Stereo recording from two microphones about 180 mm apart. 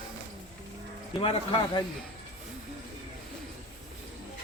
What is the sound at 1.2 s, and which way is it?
Speech, 30° left (ahead or behind).